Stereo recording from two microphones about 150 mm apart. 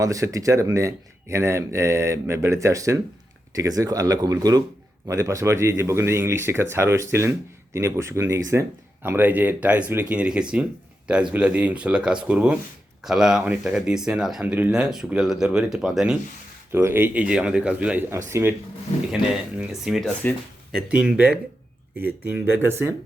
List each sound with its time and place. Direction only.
0.0 s speech: 20° right (ahead or behind); by 16.1 s 5° right (ahead or behind)
16.7 s speech: 15° right (ahead or behind)
19.1 s speech: 5° right (ahead or behind)